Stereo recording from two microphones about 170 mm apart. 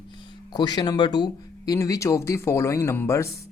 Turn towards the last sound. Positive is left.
turn(degrees=15)  # may be behind; listen again after turning